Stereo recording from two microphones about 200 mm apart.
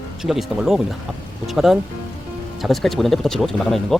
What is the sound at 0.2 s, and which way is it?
Speech, centre (ahead or behind).